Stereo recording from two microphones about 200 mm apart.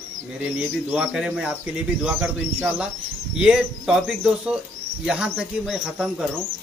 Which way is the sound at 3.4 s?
5° right (ahead or behind).